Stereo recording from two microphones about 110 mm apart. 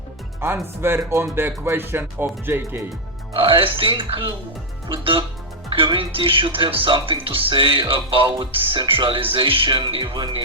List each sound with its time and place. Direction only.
0.4 s speech: 20° right (ahead or behind)
3.3 s speech: 55° right (ahead or behind)